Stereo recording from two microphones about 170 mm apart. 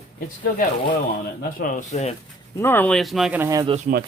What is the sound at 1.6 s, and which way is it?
Speech, 50° left (ahead or behind).